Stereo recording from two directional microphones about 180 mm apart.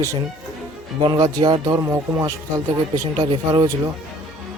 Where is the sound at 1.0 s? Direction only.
20° right (ahead or behind).